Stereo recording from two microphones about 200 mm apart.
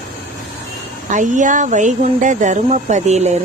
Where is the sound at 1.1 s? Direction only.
40° right (ahead or behind).